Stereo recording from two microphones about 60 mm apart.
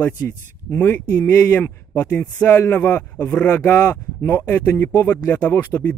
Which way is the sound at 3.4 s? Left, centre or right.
Left.